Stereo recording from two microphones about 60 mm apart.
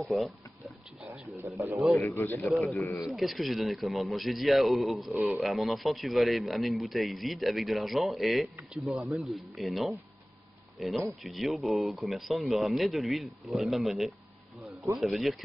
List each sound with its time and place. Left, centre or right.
0.0 s a sound: centre
2.0 s speech: left
2.4 s a man's voice: centre